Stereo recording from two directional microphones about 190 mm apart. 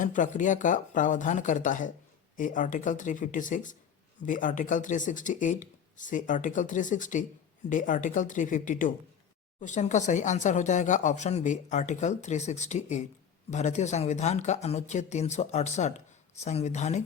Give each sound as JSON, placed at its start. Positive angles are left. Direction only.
{"t": 0.0, "sound": "speech", "side_deg": 40}